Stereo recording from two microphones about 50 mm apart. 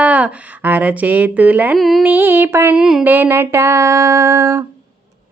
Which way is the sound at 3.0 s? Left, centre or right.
Right.